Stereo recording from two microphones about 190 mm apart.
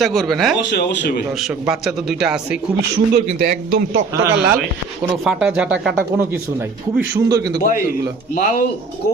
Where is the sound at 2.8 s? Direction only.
55° right (ahead or behind).